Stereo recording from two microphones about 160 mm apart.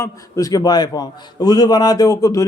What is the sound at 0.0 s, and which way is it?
A man's voice, 20° left (ahead or behind).